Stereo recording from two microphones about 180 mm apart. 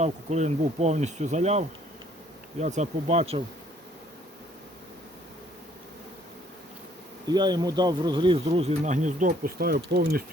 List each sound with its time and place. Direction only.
0.0 s speech: 40° right (ahead or behind)
7.3 s speech: 25° right (ahead or behind); by 10.2 s 55° right (ahead or behind)